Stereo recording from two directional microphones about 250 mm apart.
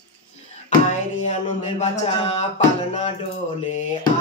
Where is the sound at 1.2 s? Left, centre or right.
Left.